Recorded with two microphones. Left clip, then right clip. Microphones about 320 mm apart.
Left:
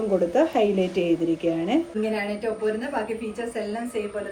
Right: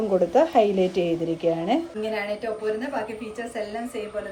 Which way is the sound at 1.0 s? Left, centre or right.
Right.